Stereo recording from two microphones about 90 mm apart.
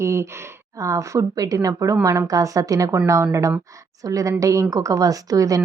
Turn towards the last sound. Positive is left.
turn(degrees=-40)  # may be behind; listen again after turning